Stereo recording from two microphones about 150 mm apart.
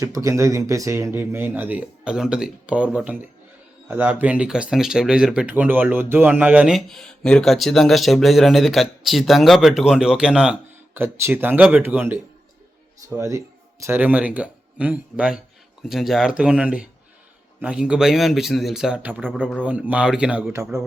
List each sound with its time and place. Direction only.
0.0 s speech: 20° right (ahead or behind); by 20.4 s 5° right (ahead or behind)